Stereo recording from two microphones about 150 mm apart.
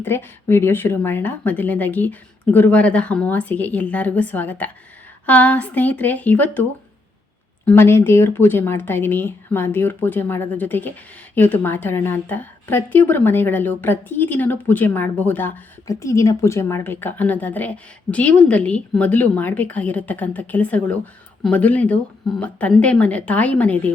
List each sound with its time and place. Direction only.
0.0 s a woman's voice: 15° left (ahead or behind)